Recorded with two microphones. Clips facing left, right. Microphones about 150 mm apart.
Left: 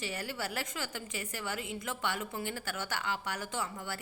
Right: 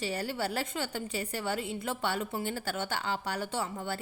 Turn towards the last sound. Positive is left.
turn(degrees=-30)  # may be behind; listen again after turning